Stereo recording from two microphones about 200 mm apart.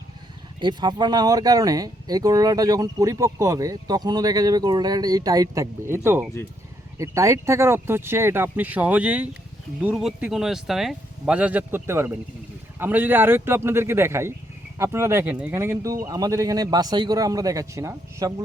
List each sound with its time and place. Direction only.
0.6 s speech: 20° right (ahead or behind)